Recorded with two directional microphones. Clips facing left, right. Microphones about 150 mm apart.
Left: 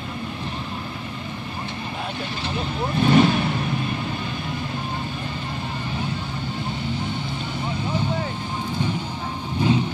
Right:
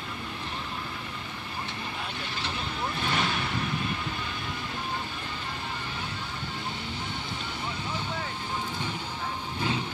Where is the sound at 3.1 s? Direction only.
25° left (ahead or behind).